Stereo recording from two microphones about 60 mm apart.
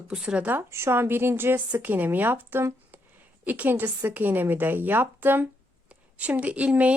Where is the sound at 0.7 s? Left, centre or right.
Right.